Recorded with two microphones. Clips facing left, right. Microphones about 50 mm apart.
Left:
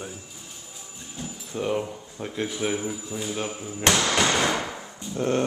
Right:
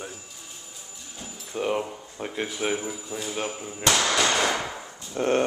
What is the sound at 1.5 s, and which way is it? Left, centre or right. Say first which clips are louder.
Speech: even; centre.